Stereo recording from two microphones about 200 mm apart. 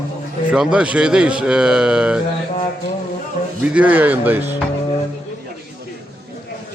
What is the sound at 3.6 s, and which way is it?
Speech, 5° right (ahead or behind).